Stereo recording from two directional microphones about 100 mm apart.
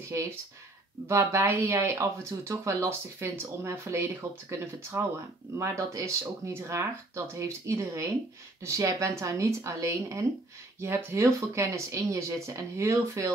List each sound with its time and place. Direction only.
1.0 s speech: 25° right (ahead or behind)